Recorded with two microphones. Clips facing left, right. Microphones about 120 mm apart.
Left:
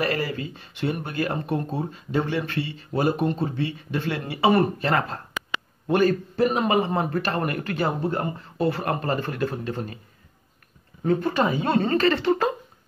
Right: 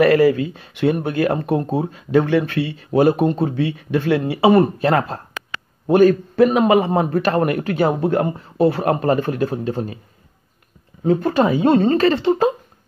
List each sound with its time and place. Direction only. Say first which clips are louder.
0.0 s speech: right 13 dB; 55° right (ahead or behind)
4.3 s speech: right 5 dB; 35° right (ahead or behind)
5.9 s speech: right 8 dB; 55° right (ahead or behind)
6.9 s speech: right 6 dB; 40° right (ahead or behind)
7.2 s speech: right 8 dB; 55° right (ahead or behind); by 9.8 s 40° right (ahead or behind)
11.1 s speech: right 6 dB; 40° right (ahead or behind)